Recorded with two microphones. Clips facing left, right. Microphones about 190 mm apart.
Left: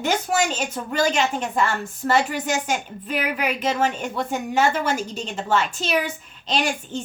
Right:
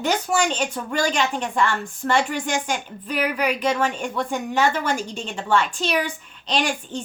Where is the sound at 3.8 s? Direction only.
40° left (ahead or behind).